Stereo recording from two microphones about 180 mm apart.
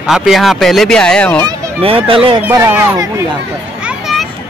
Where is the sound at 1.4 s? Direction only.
30° right (ahead or behind).